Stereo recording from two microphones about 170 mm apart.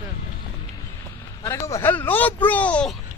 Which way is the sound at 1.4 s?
20° left (ahead or behind).